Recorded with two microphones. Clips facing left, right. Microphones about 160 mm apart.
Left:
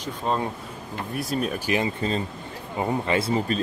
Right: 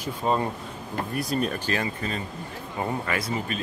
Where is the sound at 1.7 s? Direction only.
20° left (ahead or behind).